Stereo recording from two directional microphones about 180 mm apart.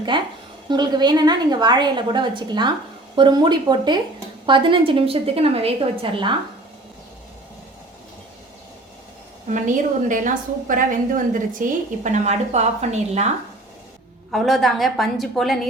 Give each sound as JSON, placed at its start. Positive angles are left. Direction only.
{"t": 0.1, "sound": "a woman's voice", "side_deg": -25}
{"t": 9.5, "sound": "a woman's voice", "side_deg": -45}
{"t": 14.3, "sound": "a woman's voice", "side_deg": 0}